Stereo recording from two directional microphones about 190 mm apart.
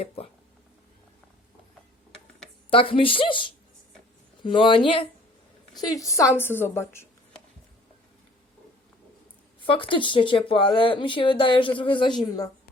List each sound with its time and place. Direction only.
2.6 s speech: 30° left (ahead or behind)
6.1 s a woman's voice: 15° left (ahead or behind)
9.6 s speech: 25° left (ahead or behind)